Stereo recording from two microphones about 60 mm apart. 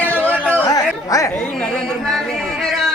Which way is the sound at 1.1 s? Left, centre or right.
Left.